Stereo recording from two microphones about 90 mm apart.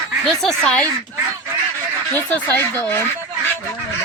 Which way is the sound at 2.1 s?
20° left (ahead or behind).